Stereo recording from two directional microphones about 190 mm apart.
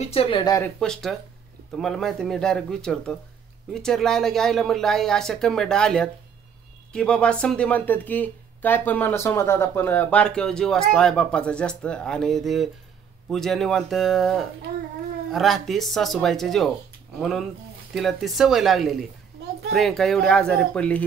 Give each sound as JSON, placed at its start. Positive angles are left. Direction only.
{"t": 0.0, "sound": "speech", "side_deg": 30}
{"t": 0.7, "sound": "a woman's voice", "side_deg": 5}